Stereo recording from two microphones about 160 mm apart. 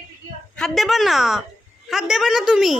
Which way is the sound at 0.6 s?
Centre (ahead or behind).